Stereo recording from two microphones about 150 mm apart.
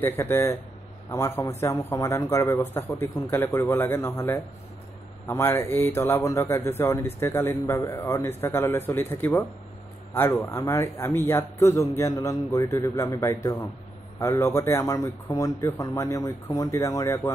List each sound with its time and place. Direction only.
0.0 s a man's voice: 15° left (ahead or behind)